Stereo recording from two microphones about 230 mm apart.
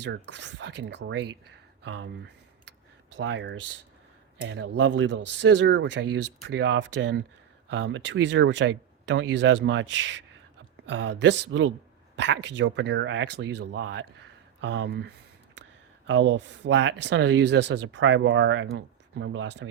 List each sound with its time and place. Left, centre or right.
0.0 s speech: right